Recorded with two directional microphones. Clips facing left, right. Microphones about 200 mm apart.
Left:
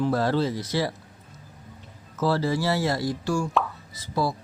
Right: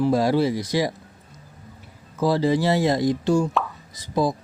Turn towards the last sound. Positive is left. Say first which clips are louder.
# right 4 dB
turn(degrees=-15)  # may be behind; listen again after turning